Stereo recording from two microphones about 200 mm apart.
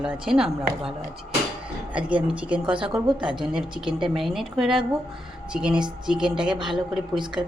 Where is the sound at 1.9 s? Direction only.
5° right (ahead or behind).